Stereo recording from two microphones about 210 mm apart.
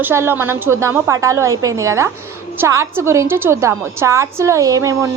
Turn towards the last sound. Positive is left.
turn(degrees=-15)  # may be behind; listen again after turning